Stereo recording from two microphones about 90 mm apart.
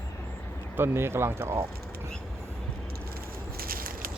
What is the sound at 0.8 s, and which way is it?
Speech, 30° right (ahead or behind).